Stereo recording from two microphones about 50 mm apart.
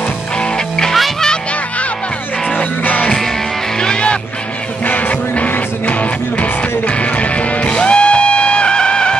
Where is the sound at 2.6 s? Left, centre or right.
Left.